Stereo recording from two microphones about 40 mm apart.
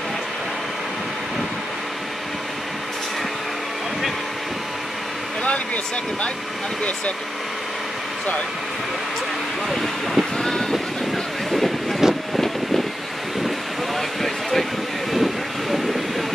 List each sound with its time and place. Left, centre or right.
9.7 s speech: centre
10.3 s speech: centre
11.5 s train: centre
14.2 s a sound: centre
15.1 s vehicle: centre